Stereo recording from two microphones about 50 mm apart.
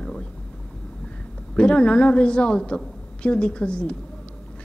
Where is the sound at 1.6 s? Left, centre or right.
Centre.